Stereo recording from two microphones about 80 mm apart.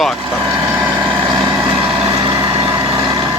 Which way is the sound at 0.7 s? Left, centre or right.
Right.